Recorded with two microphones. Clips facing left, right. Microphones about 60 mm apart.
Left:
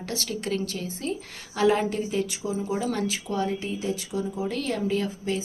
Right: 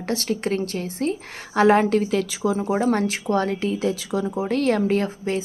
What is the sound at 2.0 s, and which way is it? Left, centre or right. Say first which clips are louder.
Speech: right 5 dB; right.